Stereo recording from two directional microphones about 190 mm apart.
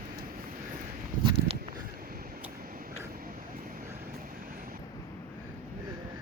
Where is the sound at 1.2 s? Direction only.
25° right (ahead or behind).